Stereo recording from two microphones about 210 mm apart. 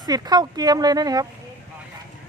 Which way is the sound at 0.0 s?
20° right (ahead or behind).